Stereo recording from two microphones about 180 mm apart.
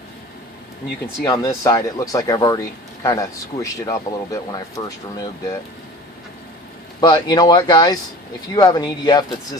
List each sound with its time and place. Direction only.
1.0 s speech: 15° left (ahead or behind)
7.0 s speech: 25° left (ahead or behind)